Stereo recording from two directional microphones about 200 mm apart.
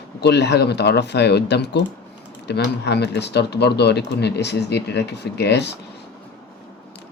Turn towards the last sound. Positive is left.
turn(degrees=60)  # may be behind; listen again after turning